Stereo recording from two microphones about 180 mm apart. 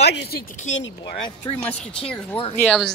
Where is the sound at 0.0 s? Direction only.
65° left (ahead or behind).